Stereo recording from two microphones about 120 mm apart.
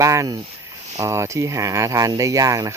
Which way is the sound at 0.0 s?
25° right (ahead or behind).